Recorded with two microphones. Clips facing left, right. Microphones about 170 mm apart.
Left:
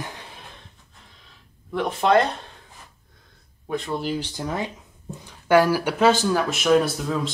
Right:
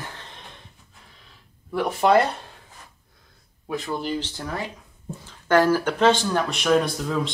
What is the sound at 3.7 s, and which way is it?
Speech, centre (ahead or behind).